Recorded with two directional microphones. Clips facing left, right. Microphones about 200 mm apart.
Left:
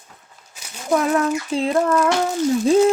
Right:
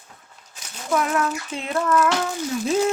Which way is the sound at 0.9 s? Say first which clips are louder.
Left 4 dB; 35° left (ahead or behind).